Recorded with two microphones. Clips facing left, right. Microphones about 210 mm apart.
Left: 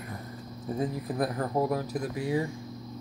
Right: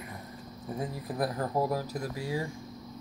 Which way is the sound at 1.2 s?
20° left (ahead or behind).